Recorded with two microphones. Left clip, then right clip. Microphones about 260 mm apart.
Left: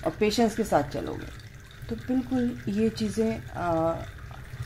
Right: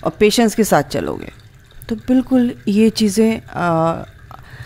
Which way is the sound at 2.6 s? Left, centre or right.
Right.